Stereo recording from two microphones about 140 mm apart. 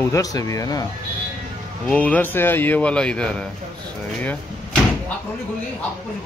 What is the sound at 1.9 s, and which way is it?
Speech, 10° left (ahead or behind).